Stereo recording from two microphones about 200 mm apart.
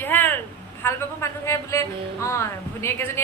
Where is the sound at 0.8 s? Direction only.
10° left (ahead or behind).